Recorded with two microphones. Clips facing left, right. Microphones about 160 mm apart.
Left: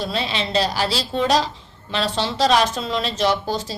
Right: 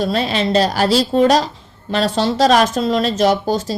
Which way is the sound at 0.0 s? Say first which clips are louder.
Right 7 dB; 45° right (ahead or behind).